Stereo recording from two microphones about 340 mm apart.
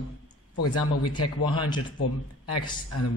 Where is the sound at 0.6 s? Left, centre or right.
Left.